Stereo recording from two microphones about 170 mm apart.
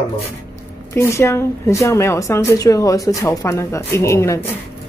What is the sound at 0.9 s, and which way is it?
A woman's voice, 15° left (ahead or behind).